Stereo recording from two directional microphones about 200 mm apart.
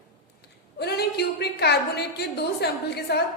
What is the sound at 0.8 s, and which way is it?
A woman's voice, 55° left (ahead or behind).